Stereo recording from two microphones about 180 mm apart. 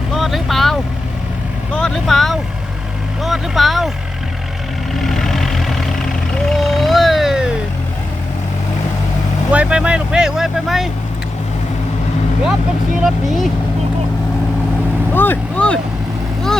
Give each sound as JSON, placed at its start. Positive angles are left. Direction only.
{"t": 0.1, "sound": "vehicle", "side_deg": 0}
{"t": 3.2, "sound": "speech", "side_deg": 0}
{"t": 4.9, "sound": "vehicle", "side_deg": 0}
{"t": 9.5, "sound": "speech", "side_deg": -5}
{"t": 13.0, "sound": "speech", "side_deg": 0}
{"t": 15.1, "sound": "speech", "side_deg": 10}